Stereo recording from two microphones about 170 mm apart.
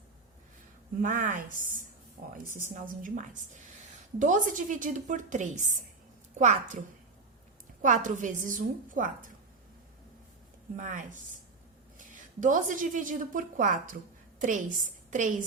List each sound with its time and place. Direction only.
1.0 s a woman's voice: 50° right (ahead or behind)
7.8 s a woman's voice: 50° right (ahead or behind)
10.8 s a woman's voice: 50° right (ahead or behind)